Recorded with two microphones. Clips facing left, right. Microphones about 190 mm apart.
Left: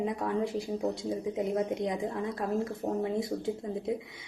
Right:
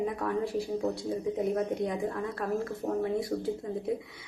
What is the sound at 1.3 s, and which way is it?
Speech, 20° left (ahead or behind).